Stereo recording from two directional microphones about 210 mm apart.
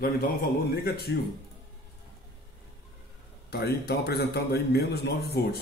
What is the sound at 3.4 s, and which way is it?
Speech, 50° left (ahead or behind).